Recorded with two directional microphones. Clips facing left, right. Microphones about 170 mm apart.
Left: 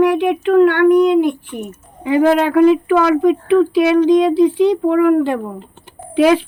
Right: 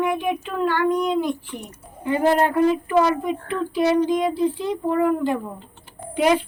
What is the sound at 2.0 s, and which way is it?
Speech, 90° left.